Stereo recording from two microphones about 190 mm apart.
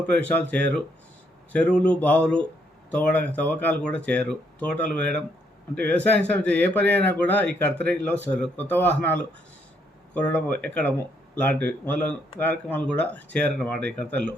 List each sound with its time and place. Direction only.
0.1 s speech: 5° left (ahead or behind)